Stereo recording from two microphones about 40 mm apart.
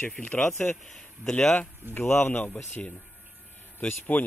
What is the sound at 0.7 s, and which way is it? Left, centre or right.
Speech, centre.